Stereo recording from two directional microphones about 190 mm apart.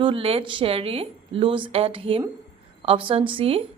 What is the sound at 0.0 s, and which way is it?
A woman's voice, 30° right (ahead or behind).